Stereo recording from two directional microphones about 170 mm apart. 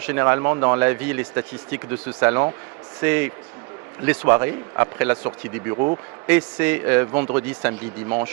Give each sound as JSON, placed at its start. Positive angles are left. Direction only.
{"t": 0.0, "sound": "speech", "side_deg": -15}
{"t": 5.7, "sound": "speech", "side_deg": -35}
{"t": 6.2, "sound": "speech", "side_deg": -10}